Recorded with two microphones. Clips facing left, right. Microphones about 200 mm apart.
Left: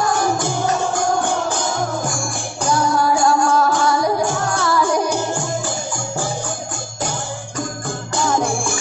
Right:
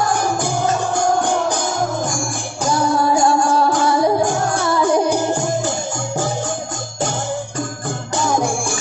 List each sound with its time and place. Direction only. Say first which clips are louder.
2.9 s music: right 2 dB; 25° right (ahead or behind)